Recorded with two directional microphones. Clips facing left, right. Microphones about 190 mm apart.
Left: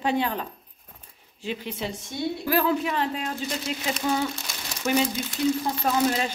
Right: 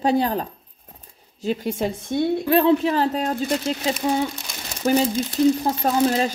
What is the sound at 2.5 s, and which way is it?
Speech, 25° right (ahead or behind).